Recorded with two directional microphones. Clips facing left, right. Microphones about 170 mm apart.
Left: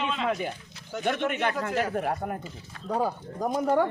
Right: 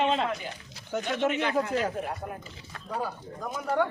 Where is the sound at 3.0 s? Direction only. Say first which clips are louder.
Left 6 dB; 45° left (ahead or behind).